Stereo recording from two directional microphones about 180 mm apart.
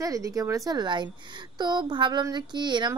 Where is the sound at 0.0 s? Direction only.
20° right (ahead or behind).